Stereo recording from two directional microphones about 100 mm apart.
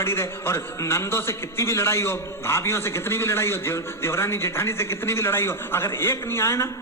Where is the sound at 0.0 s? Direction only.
25° left (ahead or behind).